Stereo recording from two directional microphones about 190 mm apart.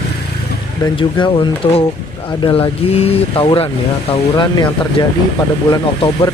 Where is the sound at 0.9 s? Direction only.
25° left (ahead or behind).